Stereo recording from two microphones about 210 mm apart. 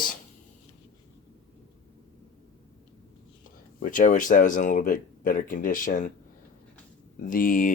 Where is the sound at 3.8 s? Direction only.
40° left (ahead or behind).